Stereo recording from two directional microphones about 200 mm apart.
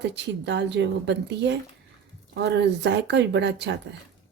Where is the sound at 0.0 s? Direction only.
60° right (ahead or behind).